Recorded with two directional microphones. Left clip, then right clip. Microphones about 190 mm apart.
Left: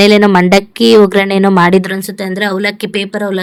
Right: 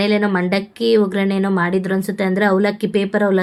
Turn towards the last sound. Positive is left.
turn(degrees=0)  # may be behind; listen again after turning